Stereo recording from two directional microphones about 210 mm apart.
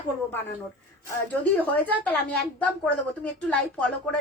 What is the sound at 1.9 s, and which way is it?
A woman's voice, 5° left (ahead or behind).